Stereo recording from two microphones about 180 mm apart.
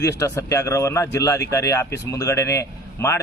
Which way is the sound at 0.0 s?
15° left (ahead or behind).